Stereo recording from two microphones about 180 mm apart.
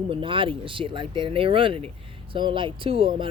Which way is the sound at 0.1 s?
30° right (ahead or behind).